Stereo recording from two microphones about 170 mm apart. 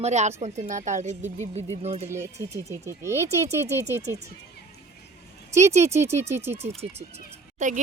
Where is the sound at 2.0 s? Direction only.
15° right (ahead or behind).